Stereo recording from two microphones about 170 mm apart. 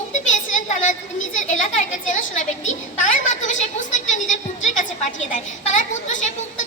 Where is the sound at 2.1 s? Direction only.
45° left (ahead or behind).